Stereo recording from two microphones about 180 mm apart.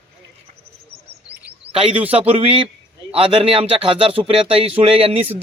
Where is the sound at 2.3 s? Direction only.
30° right (ahead or behind).